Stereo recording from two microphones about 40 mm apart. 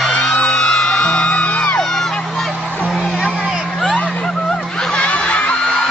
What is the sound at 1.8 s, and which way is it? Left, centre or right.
Crowd, centre.